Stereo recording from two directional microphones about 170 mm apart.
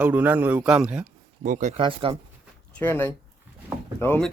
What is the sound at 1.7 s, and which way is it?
Speech, 30° right (ahead or behind).